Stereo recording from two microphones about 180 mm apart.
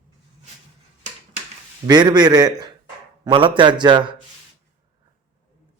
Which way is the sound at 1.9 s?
25° right (ahead or behind).